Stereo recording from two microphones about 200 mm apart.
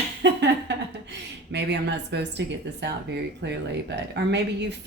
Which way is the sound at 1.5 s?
60° right (ahead or behind).